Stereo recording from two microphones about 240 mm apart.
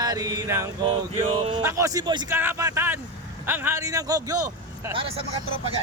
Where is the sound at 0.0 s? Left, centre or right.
Centre.